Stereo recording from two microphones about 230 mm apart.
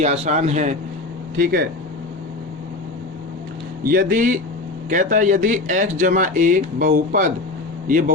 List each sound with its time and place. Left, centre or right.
0.0 s a man's voice: right
1.4 s speech: right
3.8 s speech: right